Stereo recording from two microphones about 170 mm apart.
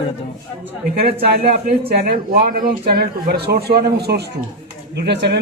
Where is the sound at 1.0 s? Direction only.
65° right (ahead or behind).